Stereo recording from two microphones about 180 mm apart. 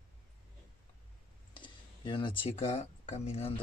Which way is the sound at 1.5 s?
25° left (ahead or behind).